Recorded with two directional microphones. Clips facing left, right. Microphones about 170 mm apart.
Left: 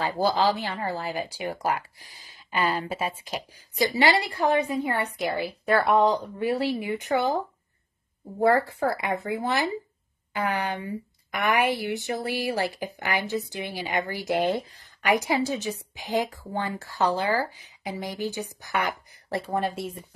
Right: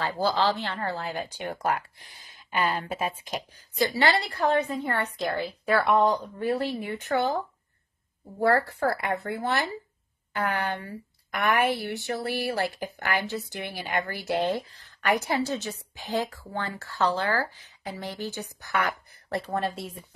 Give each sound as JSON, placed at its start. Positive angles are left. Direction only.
{"t": 0.0, "sound": "a woman's voice", "side_deg": 15}
{"t": 5.7, "sound": "speech", "side_deg": 0}
{"t": 6.2, "sound": "a woman's voice", "side_deg": 10}
{"t": 8.5, "sound": "a woman's voice", "side_deg": 15}
{"t": 8.8, "sound": "speech", "side_deg": 0}
{"t": 9.4, "sound": "a woman's voice", "side_deg": 15}
{"t": 19.4, "sound": "speech", "side_deg": 5}